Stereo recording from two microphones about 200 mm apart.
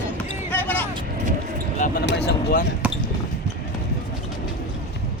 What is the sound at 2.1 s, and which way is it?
Speech, 55° left (ahead or behind).